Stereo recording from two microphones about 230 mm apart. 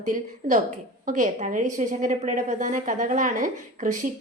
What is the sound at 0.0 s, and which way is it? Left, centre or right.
A woman's voice, right.